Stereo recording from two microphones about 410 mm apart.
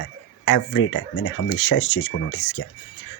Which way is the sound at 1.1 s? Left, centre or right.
Left.